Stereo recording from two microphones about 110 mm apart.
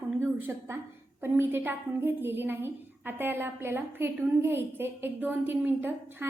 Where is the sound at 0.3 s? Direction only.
20° right (ahead or behind).